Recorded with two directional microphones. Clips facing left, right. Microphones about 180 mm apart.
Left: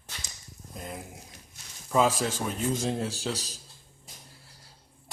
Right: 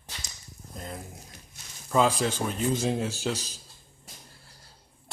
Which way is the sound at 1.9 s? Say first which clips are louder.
Right 1 dB; centre (ahead or behind).